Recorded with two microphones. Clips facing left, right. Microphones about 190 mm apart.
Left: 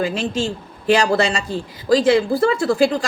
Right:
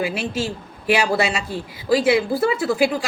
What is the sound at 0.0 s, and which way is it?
A woman's voice, 10° right (ahead or behind).